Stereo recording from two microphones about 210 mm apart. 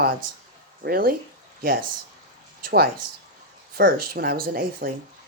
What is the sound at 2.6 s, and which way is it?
A woman's voice, 50° right (ahead or behind).